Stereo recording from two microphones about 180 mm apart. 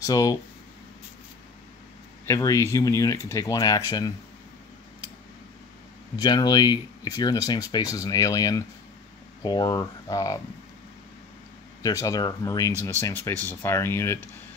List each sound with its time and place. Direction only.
0.0 s speech: 20° left (ahead or behind)
2.2 s speech: 15° left (ahead or behind)
6.1 s speech: 20° left (ahead or behind)
11.8 s speech: 20° left (ahead or behind)